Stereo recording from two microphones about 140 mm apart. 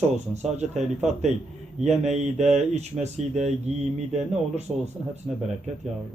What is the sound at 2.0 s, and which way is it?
Speech, 50° right (ahead or behind).